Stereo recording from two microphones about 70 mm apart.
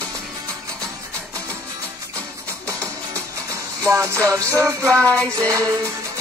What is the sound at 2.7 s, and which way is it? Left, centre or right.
Music, right.